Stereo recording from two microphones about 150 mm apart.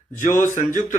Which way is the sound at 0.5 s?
60° left (ahead or behind).